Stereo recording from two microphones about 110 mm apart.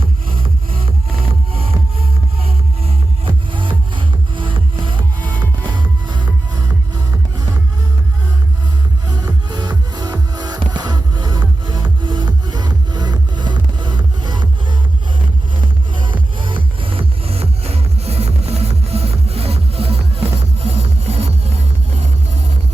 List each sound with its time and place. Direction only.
3.2 s music: 50° right (ahead or behind); by 7.6 s 35° right (ahead or behind)
9.0 s music: 35° right (ahead or behind)
16.4 s music: 50° right (ahead or behind); by 22.0 s 70° right (ahead or behind)